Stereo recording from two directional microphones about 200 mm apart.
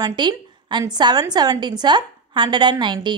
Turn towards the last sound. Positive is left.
turn(degrees=-20)  # may be behind; listen again after turning